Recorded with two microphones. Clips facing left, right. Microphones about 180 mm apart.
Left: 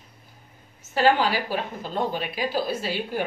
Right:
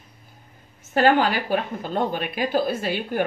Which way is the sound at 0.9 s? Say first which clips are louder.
Right 2 dB; 55° right (ahead or behind).